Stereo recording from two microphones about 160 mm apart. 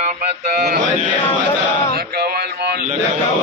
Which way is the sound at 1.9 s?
90° right.